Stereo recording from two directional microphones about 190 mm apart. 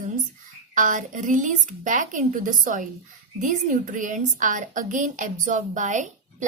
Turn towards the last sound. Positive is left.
turn(degrees=-40)  # may be behind; listen again after turning